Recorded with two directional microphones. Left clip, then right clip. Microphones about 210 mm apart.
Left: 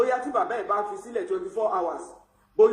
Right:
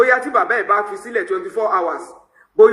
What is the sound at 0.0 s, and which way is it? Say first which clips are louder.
A man's voice: right 9 dB; 60° right (ahead or behind).